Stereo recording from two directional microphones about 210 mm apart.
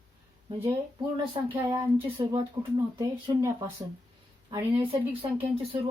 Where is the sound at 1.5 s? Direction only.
15° right (ahead or behind).